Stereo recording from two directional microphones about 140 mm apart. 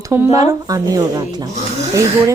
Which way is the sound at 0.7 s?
25° right (ahead or behind).